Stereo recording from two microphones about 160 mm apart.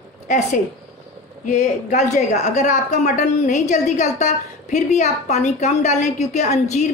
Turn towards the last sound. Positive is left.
turn(degrees=45)  # may be behind; listen again after turning